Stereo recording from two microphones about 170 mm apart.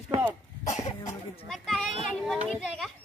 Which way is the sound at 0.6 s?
45° left (ahead or behind).